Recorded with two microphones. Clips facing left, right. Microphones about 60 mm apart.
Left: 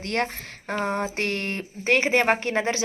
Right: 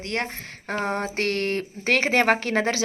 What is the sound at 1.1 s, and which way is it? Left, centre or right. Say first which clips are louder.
Speech: right 3 dB; right.